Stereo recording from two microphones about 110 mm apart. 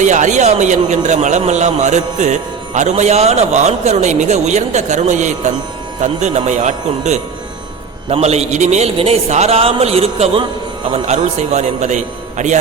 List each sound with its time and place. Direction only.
0.0 s a man's voice: 90° right
8.1 s a man's voice: 75° right (ahead or behind)
10.9 s a man's voice: 90° right